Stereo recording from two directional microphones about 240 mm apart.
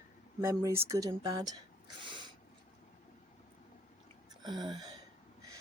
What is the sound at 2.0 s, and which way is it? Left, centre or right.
Snort, centre.